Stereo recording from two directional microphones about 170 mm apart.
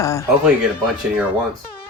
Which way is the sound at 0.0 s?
20° left (ahead or behind).